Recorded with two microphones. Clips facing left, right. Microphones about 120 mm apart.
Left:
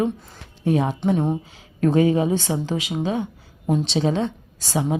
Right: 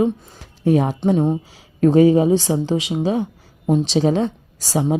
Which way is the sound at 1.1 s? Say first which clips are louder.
Right 5 dB; 15° right (ahead or behind).